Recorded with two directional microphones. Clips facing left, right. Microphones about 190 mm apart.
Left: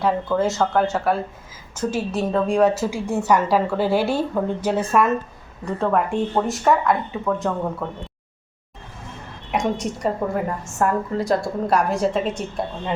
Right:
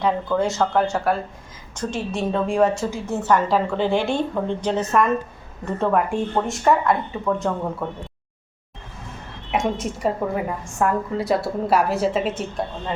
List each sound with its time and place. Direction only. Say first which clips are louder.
0.0 s a woman's voice: left 1 dB; 5° left (ahead or behind)
2.9 s a woman's voice: left 1 dB; 10° left (ahead or behind)
9.5 s a woman's voice: even; centre (ahead or behind)